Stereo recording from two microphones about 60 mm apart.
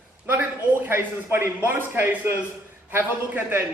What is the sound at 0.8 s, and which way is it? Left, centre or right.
Speech, right.